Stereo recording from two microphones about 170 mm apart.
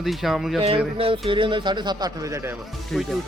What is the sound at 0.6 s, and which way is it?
Speech, 35° right (ahead or behind).